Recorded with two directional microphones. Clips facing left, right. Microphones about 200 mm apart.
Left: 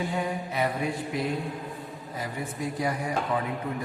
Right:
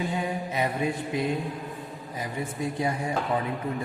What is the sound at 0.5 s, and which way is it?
Mantra, 20° right (ahead or behind).